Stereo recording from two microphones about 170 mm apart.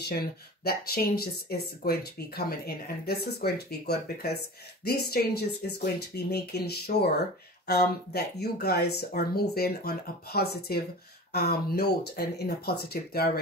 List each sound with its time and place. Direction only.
0.7 s speech: 65° left (ahead or behind)